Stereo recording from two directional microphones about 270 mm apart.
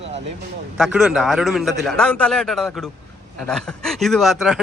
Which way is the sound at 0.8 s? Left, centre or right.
Centre.